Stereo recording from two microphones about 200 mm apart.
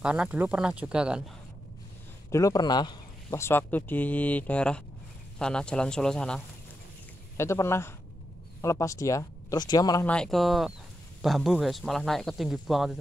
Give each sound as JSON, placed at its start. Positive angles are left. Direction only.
{"t": 0.0, "sound": "speech", "side_deg": -5}
{"t": 2.3, "sound": "speech", "side_deg": 20}
{"t": 10.0, "sound": "speech", "side_deg": 5}